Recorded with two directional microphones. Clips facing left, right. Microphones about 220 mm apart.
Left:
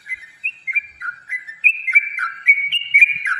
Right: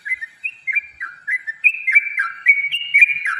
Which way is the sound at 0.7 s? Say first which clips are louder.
Left 1 dB; centre (ahead or behind).